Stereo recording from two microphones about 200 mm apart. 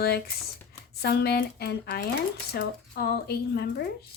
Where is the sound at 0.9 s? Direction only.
55° left (ahead or behind).